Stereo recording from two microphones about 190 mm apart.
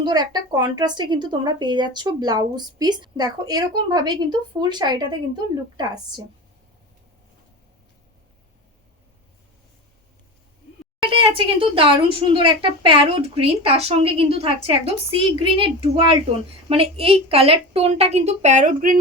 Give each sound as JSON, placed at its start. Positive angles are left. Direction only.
{"t": 0.0, "sound": "speech", "side_deg": -20}
{"t": 11.1, "sound": "a woman's voice", "side_deg": -30}